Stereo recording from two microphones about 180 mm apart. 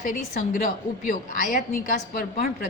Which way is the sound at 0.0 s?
50° left (ahead or behind).